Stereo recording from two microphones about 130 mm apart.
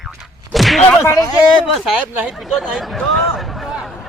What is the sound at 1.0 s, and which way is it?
Speech, 25° left (ahead or behind).